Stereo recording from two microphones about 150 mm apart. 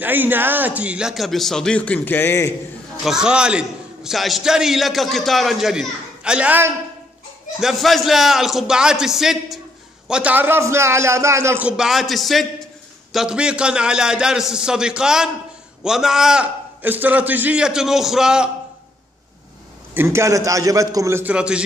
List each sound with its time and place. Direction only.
0.0 s a man's voice: 10° right (ahead or behind); by 2.5 s 15° left (ahead or behind)
3.0 s a man's voice: 5° right (ahead or behind)
7.6 s a man's voice: centre (ahead or behind)
20.0 s a man's voice: 20° right (ahead or behind)